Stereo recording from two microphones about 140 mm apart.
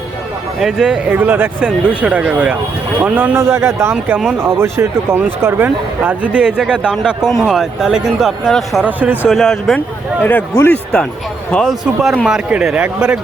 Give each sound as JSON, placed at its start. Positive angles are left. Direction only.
{"t": 0.6, "sound": "speech", "side_deg": -5}
{"t": 3.9, "sound": "speech", "side_deg": -5}
{"t": 4.4, "sound": "speech", "side_deg": -20}
{"t": 8.8, "sound": "speech", "side_deg": -10}
{"t": 9.3, "sound": "speech", "side_deg": 0}
{"t": 10.2, "sound": "speech", "side_deg": 15}
{"t": 11.5, "sound": "speech", "side_deg": 0}